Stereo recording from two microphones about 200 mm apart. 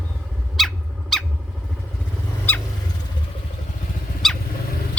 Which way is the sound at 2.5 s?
10° left (ahead or behind).